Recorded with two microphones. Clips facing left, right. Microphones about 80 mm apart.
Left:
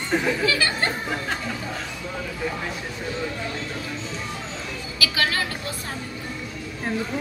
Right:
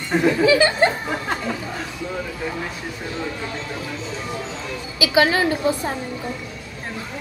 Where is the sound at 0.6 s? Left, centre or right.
Right.